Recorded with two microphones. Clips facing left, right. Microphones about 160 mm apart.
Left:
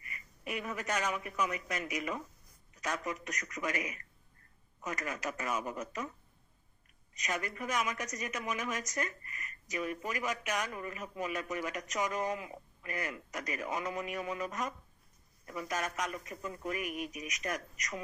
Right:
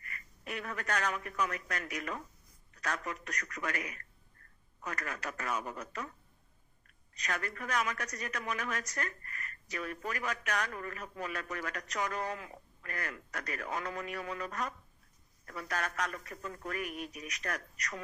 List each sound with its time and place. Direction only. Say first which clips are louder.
0.1 s a man's voice: left 2 dB; 10° left (ahead or behind)
7.2 s speech: left 1 dB; 10° left (ahead or behind)